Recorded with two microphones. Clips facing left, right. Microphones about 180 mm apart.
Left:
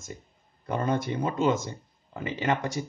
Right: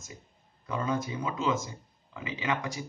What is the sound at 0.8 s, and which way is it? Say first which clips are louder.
Speech: left 4 dB; 75° left (ahead or behind).